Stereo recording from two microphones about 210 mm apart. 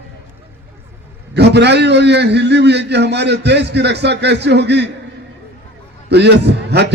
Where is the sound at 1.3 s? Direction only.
55° right (ahead or behind).